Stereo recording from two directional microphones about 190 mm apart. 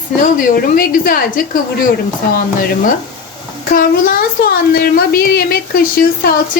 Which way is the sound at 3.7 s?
45° left (ahead or behind).